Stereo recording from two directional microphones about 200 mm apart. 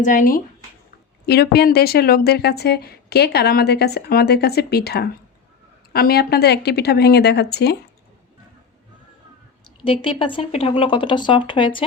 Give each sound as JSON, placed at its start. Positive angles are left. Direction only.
{"t": 0.0, "sound": "speech", "side_deg": 40}
{"t": 1.3, "sound": "speech", "side_deg": 55}
{"t": 9.6, "sound": "speech", "side_deg": 25}